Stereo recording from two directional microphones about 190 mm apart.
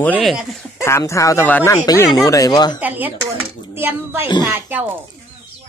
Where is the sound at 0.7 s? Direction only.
15° left (ahead or behind).